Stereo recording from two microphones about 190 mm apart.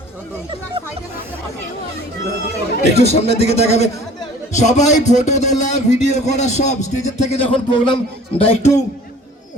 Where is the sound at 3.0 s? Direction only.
35° left (ahead or behind).